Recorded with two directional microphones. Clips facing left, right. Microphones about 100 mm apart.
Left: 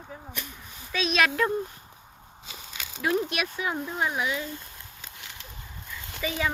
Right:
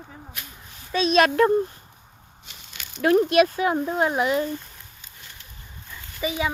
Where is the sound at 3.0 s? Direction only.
50° right (ahead or behind).